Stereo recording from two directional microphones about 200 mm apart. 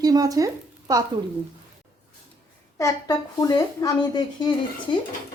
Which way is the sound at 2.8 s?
15° left (ahead or behind).